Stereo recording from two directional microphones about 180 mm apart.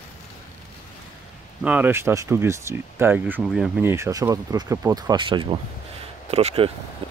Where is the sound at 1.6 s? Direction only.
10° right (ahead or behind).